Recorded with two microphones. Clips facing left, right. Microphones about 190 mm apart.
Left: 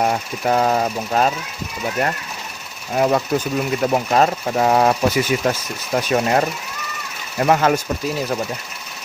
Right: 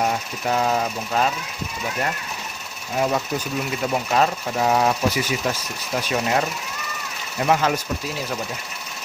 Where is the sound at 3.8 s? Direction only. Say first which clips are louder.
Left 4 dB; 45° left (ahead or behind).